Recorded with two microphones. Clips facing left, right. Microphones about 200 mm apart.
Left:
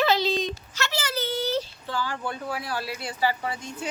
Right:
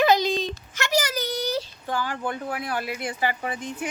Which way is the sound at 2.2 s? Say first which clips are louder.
Right 2 dB; 50° right (ahead or behind).